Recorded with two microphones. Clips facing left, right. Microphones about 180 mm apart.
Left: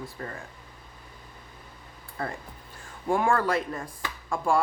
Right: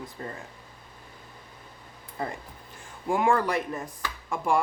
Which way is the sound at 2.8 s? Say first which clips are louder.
Even; 15° right (ahead or behind).